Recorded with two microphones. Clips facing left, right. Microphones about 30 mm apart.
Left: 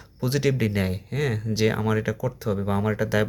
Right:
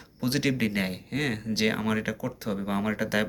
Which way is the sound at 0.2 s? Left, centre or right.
Right.